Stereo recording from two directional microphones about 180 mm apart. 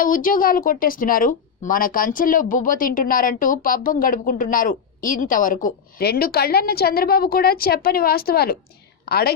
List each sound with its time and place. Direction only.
0.0 s a woman's voice: 50° left (ahead or behind)